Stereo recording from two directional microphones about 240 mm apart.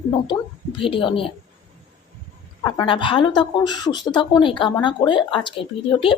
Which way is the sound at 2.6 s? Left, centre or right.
Centre.